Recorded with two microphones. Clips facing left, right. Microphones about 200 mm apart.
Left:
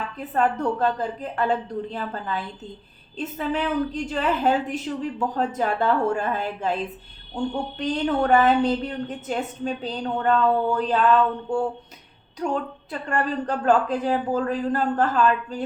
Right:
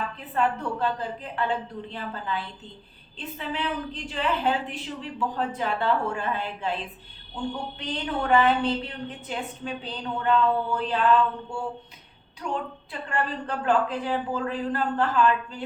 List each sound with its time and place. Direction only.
0.2 s a woman's voice: 45° left (ahead or behind)